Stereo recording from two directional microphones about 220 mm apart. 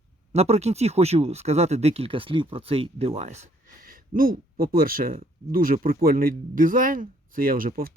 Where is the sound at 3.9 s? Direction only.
40° right (ahead or behind).